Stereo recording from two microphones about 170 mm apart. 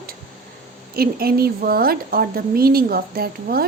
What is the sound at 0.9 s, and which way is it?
A woman's voice, 65° right (ahead or behind).